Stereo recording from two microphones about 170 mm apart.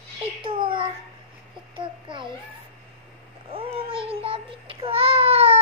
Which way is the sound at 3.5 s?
35° right (ahead or behind).